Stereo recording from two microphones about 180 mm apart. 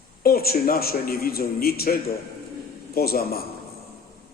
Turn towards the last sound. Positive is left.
turn(degrees=55)  # may be behind; listen again after turning